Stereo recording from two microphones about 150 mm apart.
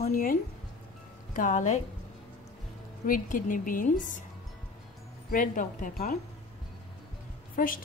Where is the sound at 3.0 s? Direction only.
65° left (ahead or behind).